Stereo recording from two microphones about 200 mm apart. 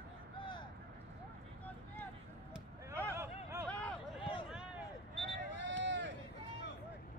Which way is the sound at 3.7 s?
5° left (ahead or behind).